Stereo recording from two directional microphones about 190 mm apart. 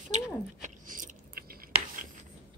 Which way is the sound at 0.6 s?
45° right (ahead or behind).